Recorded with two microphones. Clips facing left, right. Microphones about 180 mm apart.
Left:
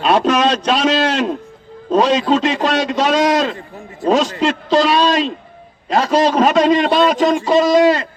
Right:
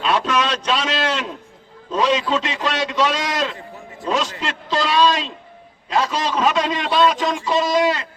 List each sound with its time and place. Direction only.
0.0 s a man's voice: 40° left (ahead or behind)